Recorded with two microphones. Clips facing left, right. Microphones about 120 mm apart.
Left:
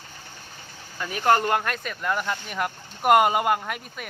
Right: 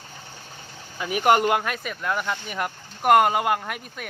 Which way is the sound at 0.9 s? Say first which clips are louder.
Right 2 dB; 10° right (ahead or behind).